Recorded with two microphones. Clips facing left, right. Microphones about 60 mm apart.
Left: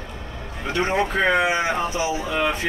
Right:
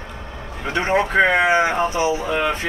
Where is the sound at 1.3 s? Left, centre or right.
Right.